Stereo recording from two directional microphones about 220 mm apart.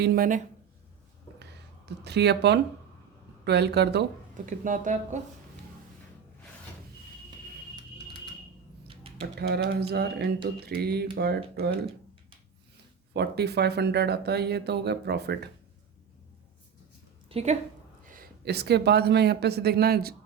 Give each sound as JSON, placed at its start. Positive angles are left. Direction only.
{"t": 0.0, "sound": "speech", "side_deg": -40}
{"t": 1.9, "sound": "speech", "side_deg": -50}
{"t": 4.4, "sound": "speech", "side_deg": -35}
{"t": 9.4, "sound": "speech", "side_deg": -45}
{"t": 13.1, "sound": "speech", "side_deg": -50}
{"t": 17.2, "sound": "a woman's voice", "side_deg": -30}
{"t": 18.1, "sound": "speech", "side_deg": -45}